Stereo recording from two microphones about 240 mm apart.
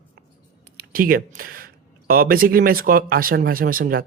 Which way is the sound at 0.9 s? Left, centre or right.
Right.